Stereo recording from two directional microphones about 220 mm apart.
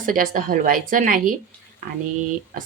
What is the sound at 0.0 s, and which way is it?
A woman's voice, 40° right (ahead or behind).